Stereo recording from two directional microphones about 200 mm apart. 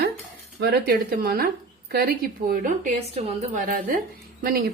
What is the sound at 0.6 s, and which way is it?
A woman's voice, 50° right (ahead or behind).